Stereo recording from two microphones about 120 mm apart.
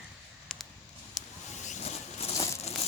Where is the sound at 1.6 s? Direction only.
80° left; by 2.3 s 65° left (ahead or behind).